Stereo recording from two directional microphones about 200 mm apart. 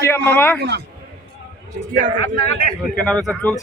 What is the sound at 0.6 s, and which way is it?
Speech, 55° right (ahead or behind).